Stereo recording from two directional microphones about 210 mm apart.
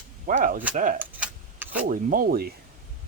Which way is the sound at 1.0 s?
10° right (ahead or behind).